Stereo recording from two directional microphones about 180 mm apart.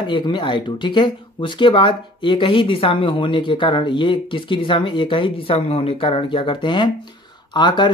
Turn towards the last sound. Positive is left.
turn(degrees=25)  # may be behind; listen again after turning